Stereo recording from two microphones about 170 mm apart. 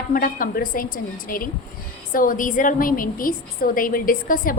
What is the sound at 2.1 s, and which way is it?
A woman's voice, 55° left (ahead or behind).